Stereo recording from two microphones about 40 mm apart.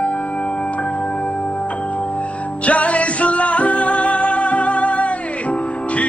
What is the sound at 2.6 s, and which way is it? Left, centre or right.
Music, left.